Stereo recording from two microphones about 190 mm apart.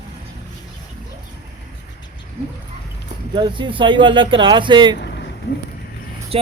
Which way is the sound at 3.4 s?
25° right (ahead or behind).